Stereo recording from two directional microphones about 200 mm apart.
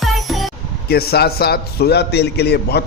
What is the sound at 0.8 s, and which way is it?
A man's voice, 50° left (ahead or behind).